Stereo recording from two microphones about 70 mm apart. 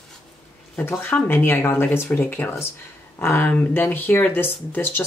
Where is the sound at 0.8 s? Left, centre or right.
Left.